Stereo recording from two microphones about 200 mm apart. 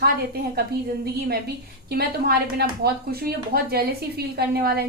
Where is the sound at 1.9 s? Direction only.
50° right (ahead or behind).